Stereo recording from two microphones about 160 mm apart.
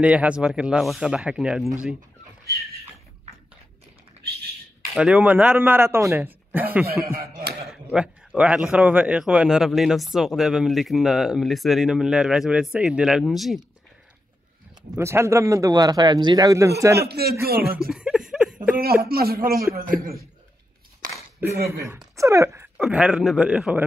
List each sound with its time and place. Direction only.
0.0 s a man's voice: 10° right (ahead or behind)
4.2 s a sound: 45° right (ahead or behind)
4.9 s a man's voice: 5° right (ahead or behind)
7.1 s chuckle: 65° right (ahead or behind)
7.6 s a man's voice: 5° right (ahead or behind)
15.0 s a man's voice: 15° right (ahead or behind)
17.0 s a man's voice: 80° right
17.7 s a sound: 5° right (ahead or behind)
19.0 s a man's voice: 70° right (ahead or behind)
21.0 s a sound: 55° right (ahead or behind)
21.4 s a man's voice: 15° right (ahead or behind)
22.1 s a sound: 20° right (ahead or behind)
22.8 s a man's voice: 5° right (ahead or behind)